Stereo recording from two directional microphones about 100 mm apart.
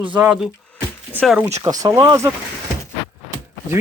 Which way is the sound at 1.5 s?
35° right (ahead or behind).